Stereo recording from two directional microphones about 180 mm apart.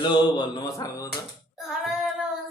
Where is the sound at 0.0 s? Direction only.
25° left (ahead or behind).